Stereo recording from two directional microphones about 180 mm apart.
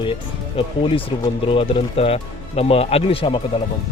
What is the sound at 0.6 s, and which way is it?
Speech, 30° left (ahead or behind).